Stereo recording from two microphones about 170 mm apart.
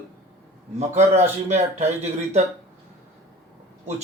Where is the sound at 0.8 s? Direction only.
40° right (ahead or behind).